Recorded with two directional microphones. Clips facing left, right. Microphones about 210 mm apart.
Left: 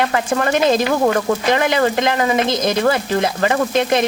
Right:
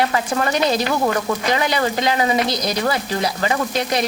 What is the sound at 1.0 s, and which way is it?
Speech, 45° left (ahead or behind).